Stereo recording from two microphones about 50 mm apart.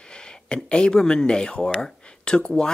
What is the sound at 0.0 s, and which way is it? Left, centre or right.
Speech, centre.